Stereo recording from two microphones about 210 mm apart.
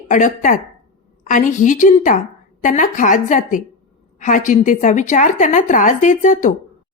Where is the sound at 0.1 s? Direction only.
35° left (ahead or behind).